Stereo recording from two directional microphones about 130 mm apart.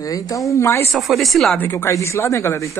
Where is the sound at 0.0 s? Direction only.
25° left (ahead or behind).